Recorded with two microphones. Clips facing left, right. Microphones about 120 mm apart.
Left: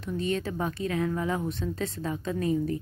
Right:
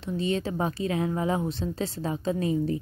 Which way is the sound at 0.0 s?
30° right (ahead or behind).